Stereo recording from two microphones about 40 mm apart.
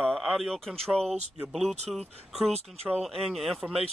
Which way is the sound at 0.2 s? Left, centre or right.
Centre.